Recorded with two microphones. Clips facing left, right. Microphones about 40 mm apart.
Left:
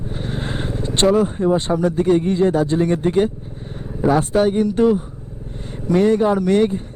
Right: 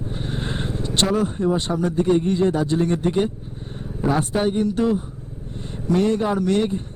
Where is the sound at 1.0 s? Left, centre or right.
Centre.